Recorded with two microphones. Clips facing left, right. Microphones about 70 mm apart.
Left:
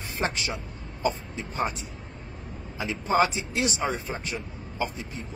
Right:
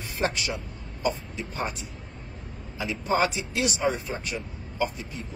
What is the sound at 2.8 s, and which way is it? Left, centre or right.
Speech, left.